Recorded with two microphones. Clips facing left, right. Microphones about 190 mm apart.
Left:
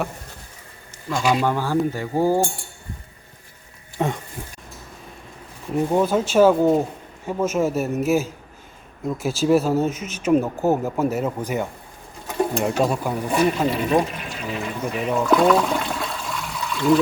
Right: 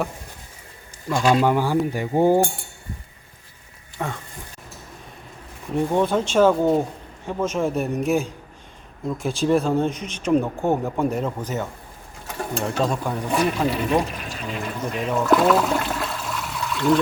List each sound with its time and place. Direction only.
1.2 s speech: 5° left (ahead or behind)
1.5 s speech: 15° right (ahead or behind)
1.9 s cutlery: 20° right (ahead or behind)
3.9 s speech: 20° left (ahead or behind)
5.7 s speech: 5° left (ahead or behind)